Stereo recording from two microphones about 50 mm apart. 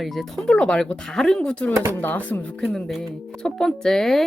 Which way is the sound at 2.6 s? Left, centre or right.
Centre.